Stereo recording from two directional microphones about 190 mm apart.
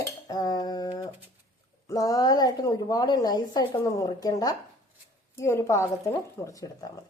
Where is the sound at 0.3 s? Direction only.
20° left (ahead or behind).